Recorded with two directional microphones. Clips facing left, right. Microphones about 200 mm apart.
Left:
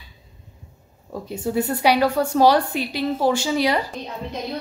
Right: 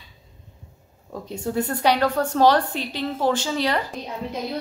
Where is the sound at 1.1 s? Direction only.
5° left (ahead or behind).